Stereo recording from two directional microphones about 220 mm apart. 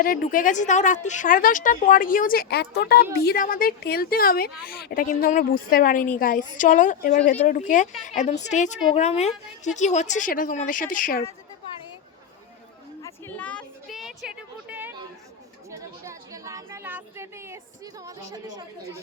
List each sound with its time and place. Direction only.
0.0 s a woman's voice: 40° left (ahead or behind)
13.0 s a sound: 10° left (ahead or behind); by 17.6 s 10° right (ahead or behind)
18.0 s a woman's voice: 15° right (ahead or behind)